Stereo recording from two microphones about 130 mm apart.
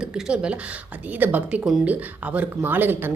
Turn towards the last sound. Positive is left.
turn(degrees=-15)  # may be behind; listen again after turning